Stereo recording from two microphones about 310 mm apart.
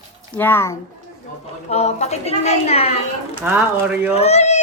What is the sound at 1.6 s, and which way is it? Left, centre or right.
A woman's voice, left.